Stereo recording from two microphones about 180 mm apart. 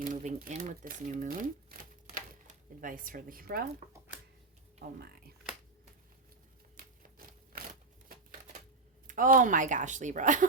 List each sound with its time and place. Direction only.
0.0 s speech: 45° right (ahead or behind)
4.8 s speech: 55° right (ahead or behind)
7.3 s a sound: 50° right (ahead or behind)
9.0 s speech: 45° right (ahead or behind)